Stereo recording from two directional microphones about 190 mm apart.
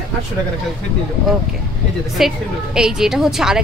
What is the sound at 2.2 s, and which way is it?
Speech, centre (ahead or behind).